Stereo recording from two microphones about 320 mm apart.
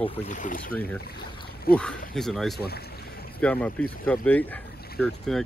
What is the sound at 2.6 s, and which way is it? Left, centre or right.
Speech, left.